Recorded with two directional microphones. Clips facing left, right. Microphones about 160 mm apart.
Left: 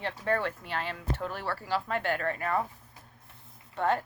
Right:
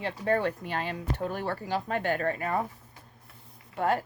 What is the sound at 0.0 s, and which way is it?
Speech, 15° right (ahead or behind).